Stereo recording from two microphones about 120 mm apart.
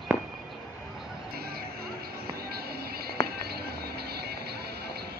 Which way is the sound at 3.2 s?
25° left (ahead or behind).